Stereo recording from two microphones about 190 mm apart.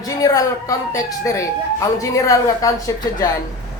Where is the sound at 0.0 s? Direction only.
20° left (ahead or behind).